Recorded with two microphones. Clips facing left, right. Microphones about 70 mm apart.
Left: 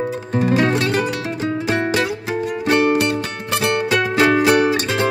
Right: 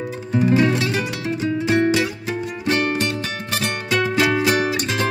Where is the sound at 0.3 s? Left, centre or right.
Left.